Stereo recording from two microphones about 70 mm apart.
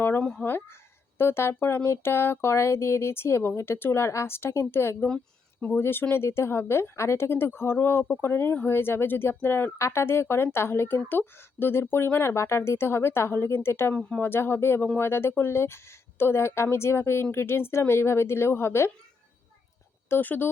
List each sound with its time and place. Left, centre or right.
0.2 s speech: centre
1.2 s speech: left
5.0 s a sound: centre
5.6 s speech: left
13.9 s speech: centre
14.2 s speech: left
20.1 s speech: left